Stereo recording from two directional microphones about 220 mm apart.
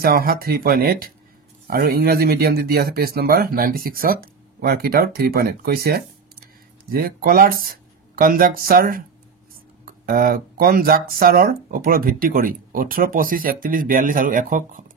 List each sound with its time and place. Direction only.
0.0 s speech: 40° right (ahead or behind)